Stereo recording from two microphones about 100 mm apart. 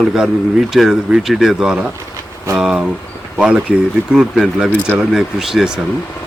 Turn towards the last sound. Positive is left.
turn(degrees=-5)  # may be behind; listen again after turning